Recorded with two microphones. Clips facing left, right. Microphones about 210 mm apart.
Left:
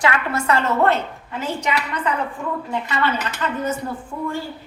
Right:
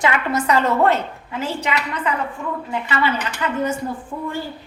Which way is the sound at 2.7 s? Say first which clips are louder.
Right 2 dB; 10° right (ahead or behind).